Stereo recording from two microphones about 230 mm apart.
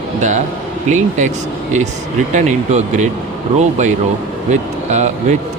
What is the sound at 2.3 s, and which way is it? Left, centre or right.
Speech, right.